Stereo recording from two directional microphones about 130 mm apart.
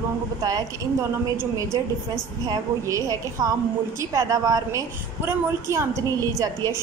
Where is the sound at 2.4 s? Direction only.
25° right (ahead or behind).